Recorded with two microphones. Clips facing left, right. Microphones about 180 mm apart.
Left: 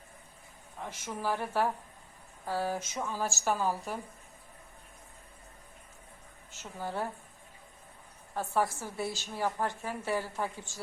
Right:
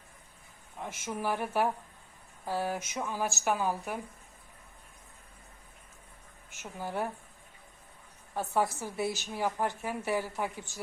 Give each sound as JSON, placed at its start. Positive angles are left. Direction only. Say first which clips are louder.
{"t": 0.8, "sound": "a woman's voice", "louder": "right 2 dB", "side_deg": -15}
{"t": 6.5, "sound": "speech", "louder": "even", "side_deg": -15}
{"t": 8.4, "sound": "a woman's voice", "louder": "right 1 dB", "side_deg": -15}